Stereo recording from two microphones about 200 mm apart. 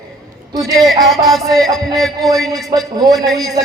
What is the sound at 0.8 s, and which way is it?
Music, centre (ahead or behind).